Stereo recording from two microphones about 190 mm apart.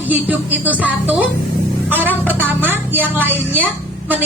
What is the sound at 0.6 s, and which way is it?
Speech, 10° right (ahead or behind).